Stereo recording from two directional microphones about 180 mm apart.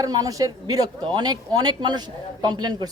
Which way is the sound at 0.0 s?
20° right (ahead or behind).